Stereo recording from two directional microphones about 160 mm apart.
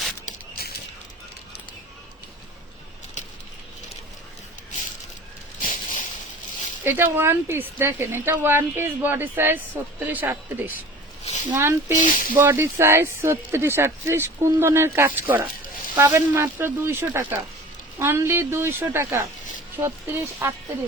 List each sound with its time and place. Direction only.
5.5 s a sound: 55° left (ahead or behind)
6.8 s speech: 15° right (ahead or behind)
11.9 s speech: 55° left (ahead or behind)
12.4 s speech: 15° right (ahead or behind)